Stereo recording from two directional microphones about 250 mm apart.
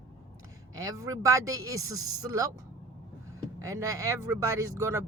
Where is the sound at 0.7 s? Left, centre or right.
Centre.